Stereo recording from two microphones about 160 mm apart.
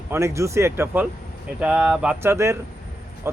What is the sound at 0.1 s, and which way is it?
Speech, 20° right (ahead or behind).